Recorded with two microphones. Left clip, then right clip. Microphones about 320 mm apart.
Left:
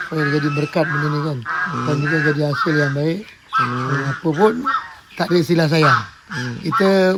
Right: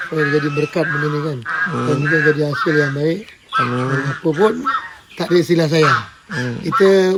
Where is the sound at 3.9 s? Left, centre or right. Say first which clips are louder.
Right 2 dB; centre.